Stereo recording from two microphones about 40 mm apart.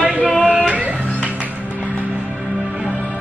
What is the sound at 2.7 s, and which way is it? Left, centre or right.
Music, right.